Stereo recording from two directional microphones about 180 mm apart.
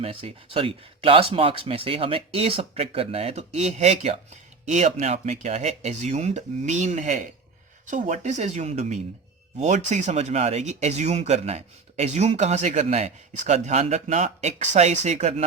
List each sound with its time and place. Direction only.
0.0 s speech: 30° right (ahead or behind)